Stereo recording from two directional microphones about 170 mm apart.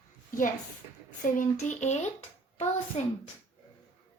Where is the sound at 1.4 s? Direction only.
45° left (ahead or behind).